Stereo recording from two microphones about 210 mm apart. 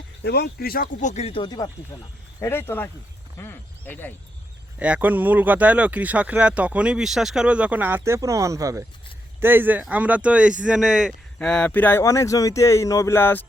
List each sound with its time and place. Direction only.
0.2 s speech: 50° left (ahead or behind); by 4.1 s 10° left (ahead or behind)
4.8 s speech: 5° right (ahead or behind); by 13.4 s 10° left (ahead or behind)